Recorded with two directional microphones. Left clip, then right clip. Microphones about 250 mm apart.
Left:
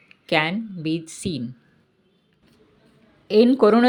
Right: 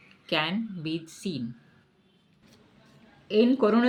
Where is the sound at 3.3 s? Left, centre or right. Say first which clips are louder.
Left 7 dB; left.